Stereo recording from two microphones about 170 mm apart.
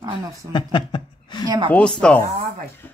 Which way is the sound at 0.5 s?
25° left (ahead or behind).